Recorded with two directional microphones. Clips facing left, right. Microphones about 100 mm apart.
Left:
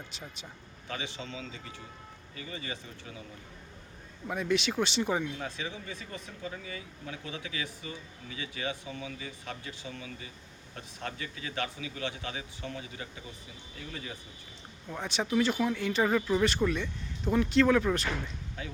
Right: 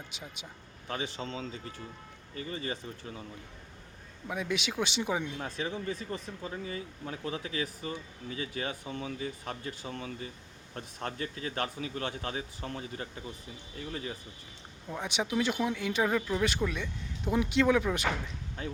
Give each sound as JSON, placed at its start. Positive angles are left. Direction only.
{"t": 0.9, "sound": "speech", "side_deg": -40}
{"t": 4.3, "sound": "speech", "side_deg": -5}
{"t": 5.4, "sound": "speech", "side_deg": -45}
{"t": 14.8, "sound": "speech", "side_deg": -10}